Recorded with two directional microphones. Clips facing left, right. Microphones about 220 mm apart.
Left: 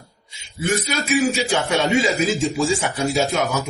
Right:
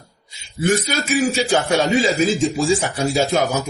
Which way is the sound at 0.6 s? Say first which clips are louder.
Right 3 dB; 35° right (ahead or behind).